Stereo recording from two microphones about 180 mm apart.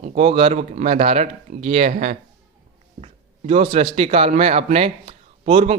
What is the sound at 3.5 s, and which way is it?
A man's voice, 35° right (ahead or behind).